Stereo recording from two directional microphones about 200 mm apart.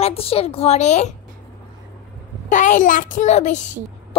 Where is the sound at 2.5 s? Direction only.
40° left (ahead or behind).